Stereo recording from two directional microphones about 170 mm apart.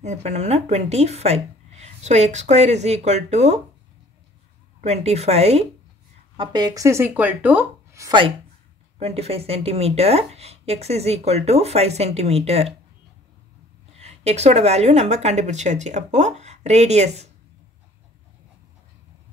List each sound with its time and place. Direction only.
0.0 s speech: 40° right (ahead or behind)
4.8 s speech: 40° right (ahead or behind)
6.3 s speech: 25° right (ahead or behind)
9.0 s speech: 35° right (ahead or behind)
13.9 s speech: 40° right (ahead or behind)